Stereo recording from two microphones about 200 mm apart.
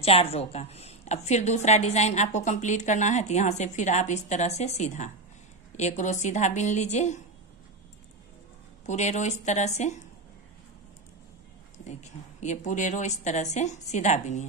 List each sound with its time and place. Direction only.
0.0 s a woman's voice: 30° left (ahead or behind)
8.8 s a woman's voice: 35° left (ahead or behind)
11.9 s a woman's voice: 35° left (ahead or behind)